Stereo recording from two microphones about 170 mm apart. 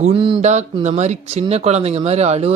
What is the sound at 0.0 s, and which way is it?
Speech, 30° right (ahead or behind).